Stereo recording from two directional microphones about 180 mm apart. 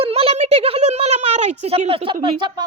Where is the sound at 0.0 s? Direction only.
35° right (ahead or behind).